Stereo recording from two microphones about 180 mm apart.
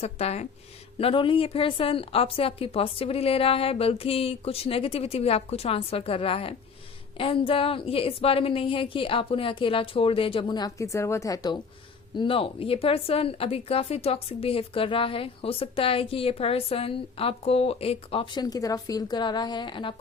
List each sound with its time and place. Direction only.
0.0 s a woman's voice: 35° left (ahead or behind)